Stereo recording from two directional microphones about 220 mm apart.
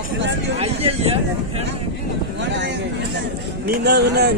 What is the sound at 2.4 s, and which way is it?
Speech, 55° right (ahead or behind).